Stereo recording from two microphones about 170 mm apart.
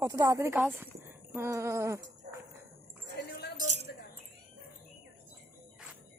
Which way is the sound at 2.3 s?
70° right (ahead or behind).